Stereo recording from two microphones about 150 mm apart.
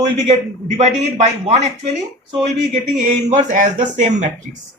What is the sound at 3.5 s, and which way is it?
Speech, 55° right (ahead or behind).